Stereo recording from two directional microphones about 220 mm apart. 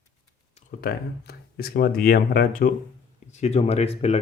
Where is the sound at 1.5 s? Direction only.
45° left (ahead or behind).